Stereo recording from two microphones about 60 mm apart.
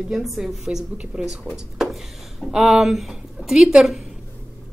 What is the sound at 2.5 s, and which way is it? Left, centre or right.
Speech, centre.